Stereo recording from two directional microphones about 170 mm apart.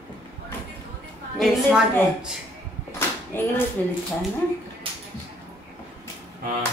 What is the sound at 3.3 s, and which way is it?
Speech, 10° left (ahead or behind).